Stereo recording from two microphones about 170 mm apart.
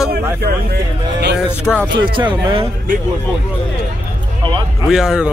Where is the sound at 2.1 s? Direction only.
30° right (ahead or behind).